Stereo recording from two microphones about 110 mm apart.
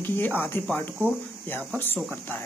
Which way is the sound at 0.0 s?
20° left (ahead or behind).